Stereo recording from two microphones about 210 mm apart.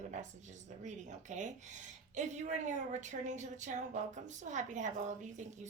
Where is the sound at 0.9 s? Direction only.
35° right (ahead or behind).